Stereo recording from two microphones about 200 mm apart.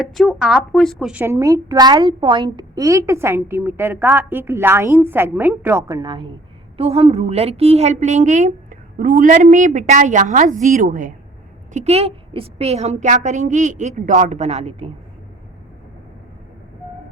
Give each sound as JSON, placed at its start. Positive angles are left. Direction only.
{"t": 0.0, "sound": "a woman's voice", "side_deg": 0}
{"t": 1.2, "sound": "a woman's voice", "side_deg": -15}